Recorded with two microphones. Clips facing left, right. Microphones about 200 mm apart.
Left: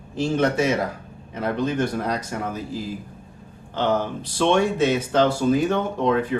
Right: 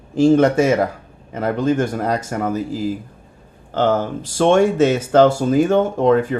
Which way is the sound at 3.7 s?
45° right (ahead or behind).